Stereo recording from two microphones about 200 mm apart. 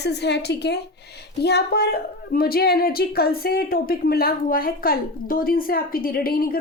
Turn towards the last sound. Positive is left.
turn(degrees=45)  # may be behind; listen again after turning